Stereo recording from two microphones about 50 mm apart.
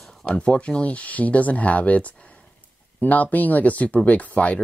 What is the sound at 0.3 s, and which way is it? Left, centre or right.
Speech, left.